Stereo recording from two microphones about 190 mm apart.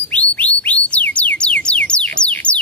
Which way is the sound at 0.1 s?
5° left (ahead or behind).